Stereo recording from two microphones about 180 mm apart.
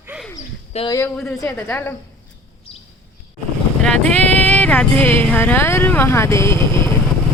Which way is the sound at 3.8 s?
5° left (ahead or behind).